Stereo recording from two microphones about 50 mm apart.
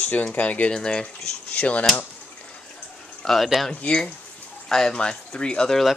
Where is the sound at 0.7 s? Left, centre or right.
Centre.